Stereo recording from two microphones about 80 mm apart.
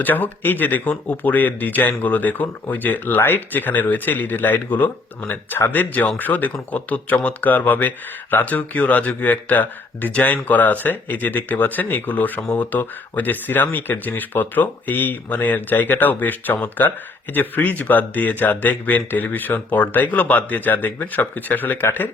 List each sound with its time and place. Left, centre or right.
0.0 s speech: left